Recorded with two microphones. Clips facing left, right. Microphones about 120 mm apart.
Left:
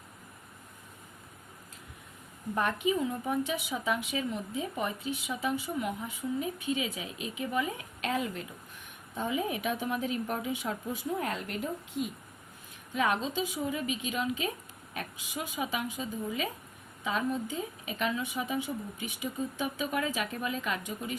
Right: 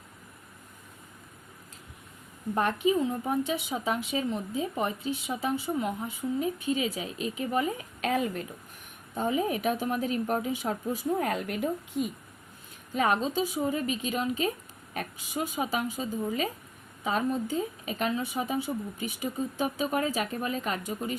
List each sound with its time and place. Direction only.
2.6 s a woman's voice: 30° right (ahead or behind)
11.2 s speech: 50° right (ahead or behind)
12.9 s a woman's voice: 40° right (ahead or behind)